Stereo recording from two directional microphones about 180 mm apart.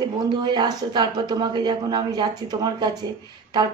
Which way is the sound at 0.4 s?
25° right (ahead or behind).